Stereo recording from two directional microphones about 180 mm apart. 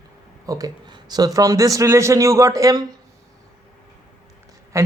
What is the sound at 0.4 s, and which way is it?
A man's voice, 20° right (ahead or behind).